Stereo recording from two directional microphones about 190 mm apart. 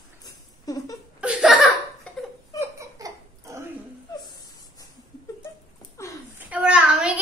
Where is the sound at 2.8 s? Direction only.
15° right (ahead or behind).